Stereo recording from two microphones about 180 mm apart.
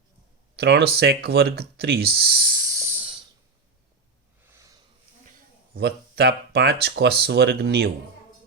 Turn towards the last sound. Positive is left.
turn(degrees=-65)  # may be behind; listen again after turning